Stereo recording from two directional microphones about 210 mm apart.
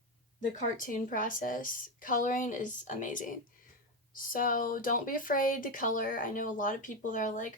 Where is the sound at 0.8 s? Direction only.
40° left (ahead or behind).